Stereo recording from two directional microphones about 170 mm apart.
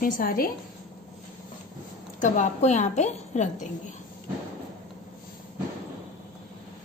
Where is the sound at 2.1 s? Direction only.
45° left (ahead or behind).